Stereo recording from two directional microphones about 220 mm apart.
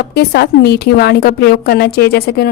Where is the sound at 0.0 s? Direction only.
45° left (ahead or behind).